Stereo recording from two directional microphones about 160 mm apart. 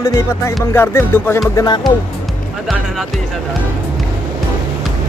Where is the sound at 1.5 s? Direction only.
25° left (ahead or behind).